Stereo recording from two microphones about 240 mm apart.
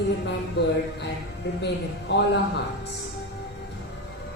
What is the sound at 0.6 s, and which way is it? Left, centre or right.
A man's voice, left.